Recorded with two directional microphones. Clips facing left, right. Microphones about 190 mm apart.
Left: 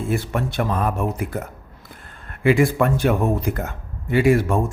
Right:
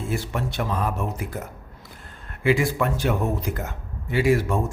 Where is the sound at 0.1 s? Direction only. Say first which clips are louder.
Left 4 dB; 55° left (ahead or behind).